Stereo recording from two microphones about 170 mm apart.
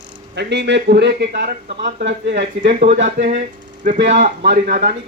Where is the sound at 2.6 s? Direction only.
50° right (ahead or behind).